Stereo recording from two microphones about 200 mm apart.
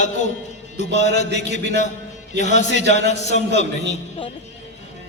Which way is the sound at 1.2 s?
35° left (ahead or behind).